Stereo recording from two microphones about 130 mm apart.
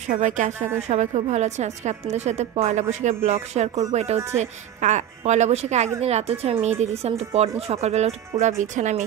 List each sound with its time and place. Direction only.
0.0 s speech: 70° right (ahead or behind)
0.7 s a woman's voice: 60° right (ahead or behind)